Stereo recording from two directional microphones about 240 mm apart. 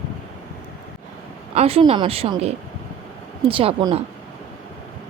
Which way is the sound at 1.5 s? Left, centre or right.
Right.